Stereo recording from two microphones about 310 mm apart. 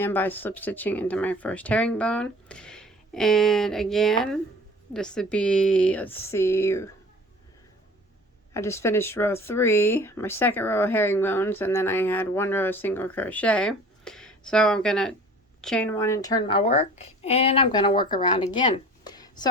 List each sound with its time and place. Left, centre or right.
0.0 s speech: centre
8.5 s speech: centre